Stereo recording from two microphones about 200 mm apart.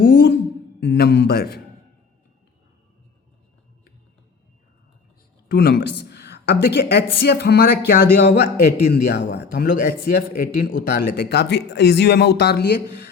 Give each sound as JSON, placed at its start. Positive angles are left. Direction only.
{"t": 0.0, "sound": "a sound", "side_deg": 45}
{"t": 0.8, "sound": "a man's voice", "side_deg": 55}
{"t": 5.5, "sound": "speech", "side_deg": 55}